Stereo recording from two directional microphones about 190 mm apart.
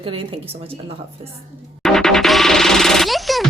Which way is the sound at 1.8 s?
Centre (ahead or behind).